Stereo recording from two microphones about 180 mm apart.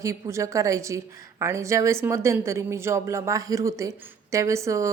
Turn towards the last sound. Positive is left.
turn(degrees=-15)  # may be behind; listen again after turning